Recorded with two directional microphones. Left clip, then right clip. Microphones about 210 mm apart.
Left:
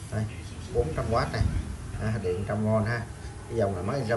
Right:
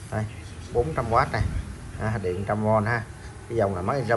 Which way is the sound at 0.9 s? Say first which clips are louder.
Right 5 dB; 5° left (ahead or behind).